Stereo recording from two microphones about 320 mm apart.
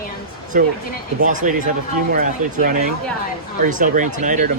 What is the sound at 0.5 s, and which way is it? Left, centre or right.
Speech, right.